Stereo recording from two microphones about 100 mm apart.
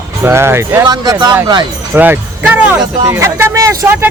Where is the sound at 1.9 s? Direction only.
15° right (ahead or behind).